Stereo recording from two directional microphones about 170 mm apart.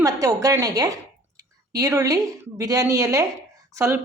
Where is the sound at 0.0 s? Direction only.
20° right (ahead or behind).